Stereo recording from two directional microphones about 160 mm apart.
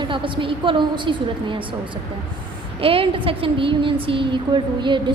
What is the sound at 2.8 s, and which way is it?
A woman's voice, 35° right (ahead or behind).